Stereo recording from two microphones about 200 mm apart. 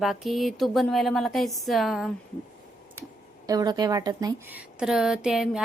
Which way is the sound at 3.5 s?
20° right (ahead or behind).